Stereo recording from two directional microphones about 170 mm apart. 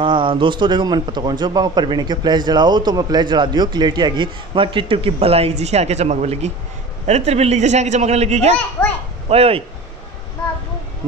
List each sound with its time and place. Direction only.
0.0 s a man's voice: 30° right (ahead or behind)
8.8 s a child's voice: 10° left (ahead or behind)
9.3 s a man's voice: 35° right (ahead or behind)